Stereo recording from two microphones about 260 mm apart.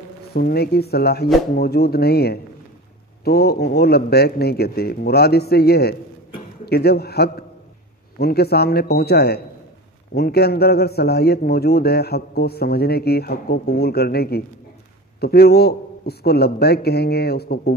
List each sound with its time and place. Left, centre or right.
0.3 s a man's voice: left